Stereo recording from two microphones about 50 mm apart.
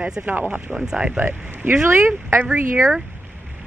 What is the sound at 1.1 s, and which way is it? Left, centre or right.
Speech, right.